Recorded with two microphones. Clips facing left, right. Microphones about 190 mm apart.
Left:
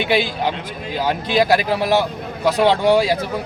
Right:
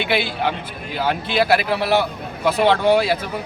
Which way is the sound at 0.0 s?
15° left (ahead or behind).